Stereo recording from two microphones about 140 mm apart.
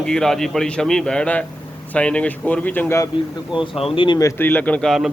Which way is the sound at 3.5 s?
40° left (ahead or behind).